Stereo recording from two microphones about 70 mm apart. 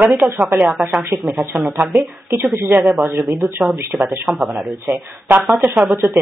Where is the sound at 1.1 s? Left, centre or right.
Centre.